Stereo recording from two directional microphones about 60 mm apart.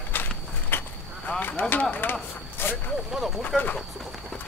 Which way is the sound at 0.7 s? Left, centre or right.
Left.